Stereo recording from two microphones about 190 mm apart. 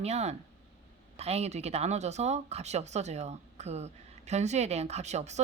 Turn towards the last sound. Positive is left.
turn(degrees=-35)  # may be behind; listen again after turning